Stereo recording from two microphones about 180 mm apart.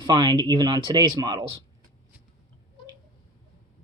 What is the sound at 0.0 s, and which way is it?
Speech, 25° right (ahead or behind).